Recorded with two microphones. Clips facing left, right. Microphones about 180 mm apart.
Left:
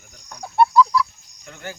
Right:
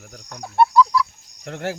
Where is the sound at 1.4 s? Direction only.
75° right (ahead or behind).